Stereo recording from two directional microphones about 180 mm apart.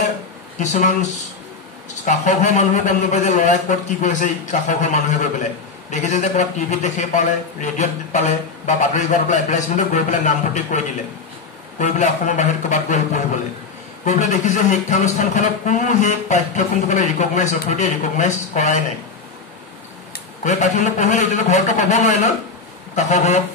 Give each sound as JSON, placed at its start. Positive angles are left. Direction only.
{"t": 0.6, "sound": "speech", "side_deg": 45}
{"t": 2.0, "sound": "speech", "side_deg": 40}
{"t": 11.8, "sound": "speech", "side_deg": 40}
{"t": 20.4, "sound": "speech", "side_deg": 40}